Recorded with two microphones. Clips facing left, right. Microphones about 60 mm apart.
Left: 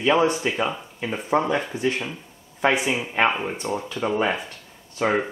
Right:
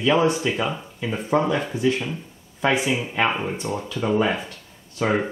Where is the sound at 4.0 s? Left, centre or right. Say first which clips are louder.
Right 1 dB; left.